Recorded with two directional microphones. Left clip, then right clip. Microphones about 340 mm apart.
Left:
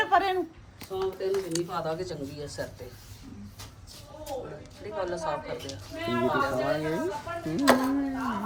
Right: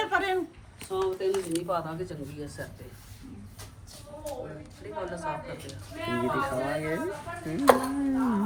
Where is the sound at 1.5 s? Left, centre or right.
Left.